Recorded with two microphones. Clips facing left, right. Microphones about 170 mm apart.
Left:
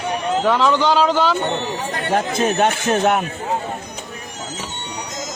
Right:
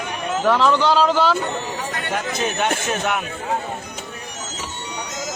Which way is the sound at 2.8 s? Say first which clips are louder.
Left 6 dB; 50° left (ahead or behind).